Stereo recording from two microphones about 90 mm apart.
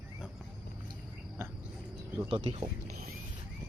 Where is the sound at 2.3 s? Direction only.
65° right (ahead or behind).